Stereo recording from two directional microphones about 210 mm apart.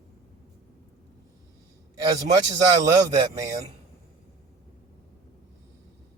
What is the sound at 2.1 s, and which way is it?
Speech, 20° right (ahead or behind).